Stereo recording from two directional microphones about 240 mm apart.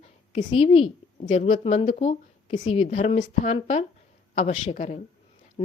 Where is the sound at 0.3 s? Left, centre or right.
Left.